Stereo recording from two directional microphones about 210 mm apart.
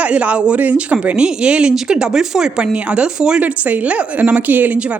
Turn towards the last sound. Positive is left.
turn(degrees=-5)  # may be behind; listen again after turning